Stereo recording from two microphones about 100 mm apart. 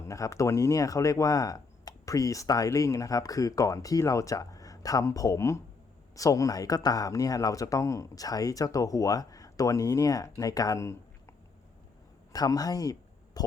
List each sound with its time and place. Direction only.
0.0 s speech: 30° left (ahead or behind)
12.3 s speech: 40° left (ahead or behind)